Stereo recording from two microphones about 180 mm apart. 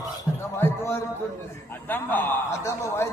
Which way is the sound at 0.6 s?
15° left (ahead or behind).